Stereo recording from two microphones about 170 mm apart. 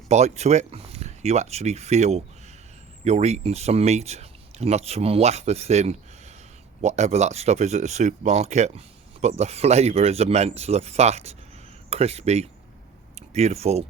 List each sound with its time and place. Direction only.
0.1 s speech: 40° right (ahead or behind)